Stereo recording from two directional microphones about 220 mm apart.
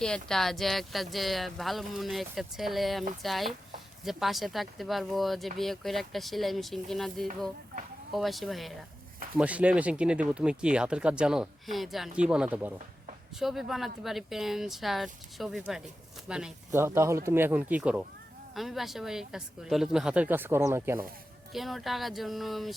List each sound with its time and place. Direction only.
0.0 s speech: 5° left (ahead or behind)
21.5 s speech: centre (ahead or behind)